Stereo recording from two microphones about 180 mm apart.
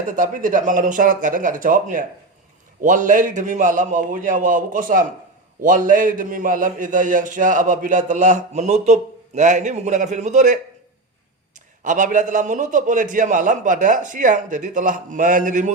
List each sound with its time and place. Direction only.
0.1 s a man's voice: 45° right (ahead or behind)
11.8 s a man's voice: 45° right (ahead or behind)